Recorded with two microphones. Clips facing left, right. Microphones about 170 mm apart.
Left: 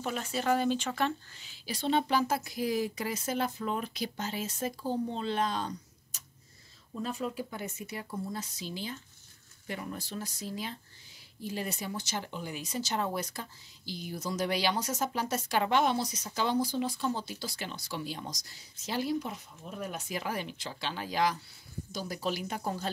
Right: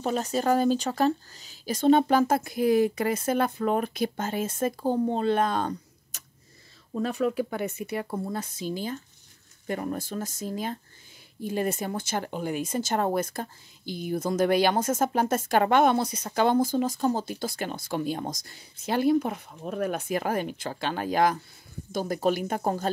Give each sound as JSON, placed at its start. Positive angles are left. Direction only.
{"t": 0.0, "sound": "speech", "side_deg": -40}
{"t": 6.9, "sound": "speech", "side_deg": -70}